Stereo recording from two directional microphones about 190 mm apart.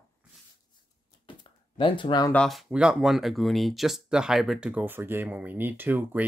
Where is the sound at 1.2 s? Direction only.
25° left (ahead or behind).